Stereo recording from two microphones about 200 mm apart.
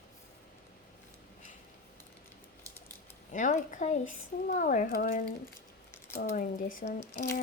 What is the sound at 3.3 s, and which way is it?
Speech, 40° left (ahead or behind).